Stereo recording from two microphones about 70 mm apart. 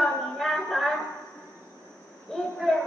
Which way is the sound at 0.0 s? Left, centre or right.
Centre.